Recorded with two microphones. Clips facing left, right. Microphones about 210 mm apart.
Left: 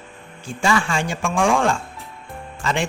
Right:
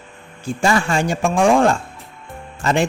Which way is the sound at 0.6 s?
40° right (ahead or behind).